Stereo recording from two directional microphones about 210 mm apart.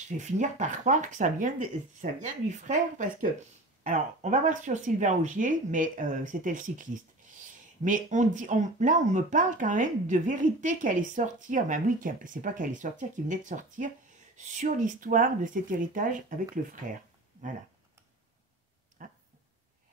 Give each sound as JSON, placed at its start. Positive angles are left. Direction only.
{"t": 0.2, "sound": "speech", "side_deg": -35}